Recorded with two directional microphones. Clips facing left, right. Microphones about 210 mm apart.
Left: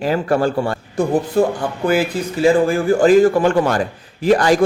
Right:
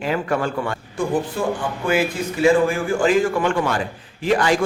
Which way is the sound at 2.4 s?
35° left (ahead or behind).